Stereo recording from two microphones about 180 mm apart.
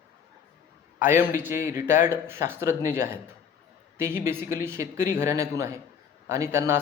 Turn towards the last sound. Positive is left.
turn(degrees=-15)  # may be behind; listen again after turning